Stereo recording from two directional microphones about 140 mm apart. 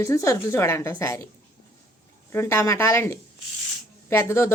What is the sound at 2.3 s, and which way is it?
A woman's voice, 20° left (ahead or behind).